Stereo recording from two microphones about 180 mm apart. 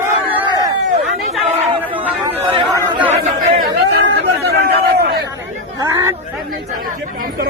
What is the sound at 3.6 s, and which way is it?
Chatter, 70° right (ahead or behind).